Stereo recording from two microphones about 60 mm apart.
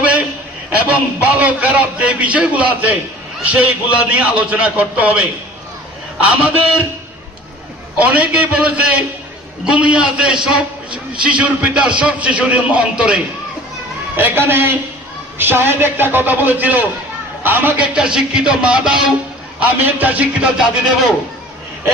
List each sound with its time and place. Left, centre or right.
0.0 s a sound: right
0.9 s a man's voice: right
7.9 s a man's voice: right
14.2 s a man's voice: right
17.7 s a man's voice: centre
19.5 s a man's voice: right